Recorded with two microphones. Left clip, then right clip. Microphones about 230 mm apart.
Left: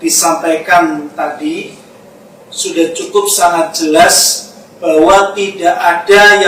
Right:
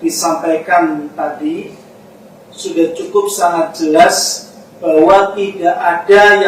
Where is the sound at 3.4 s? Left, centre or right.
Centre.